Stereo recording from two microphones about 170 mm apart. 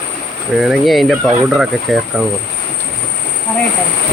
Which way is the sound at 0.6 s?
Centre (ahead or behind).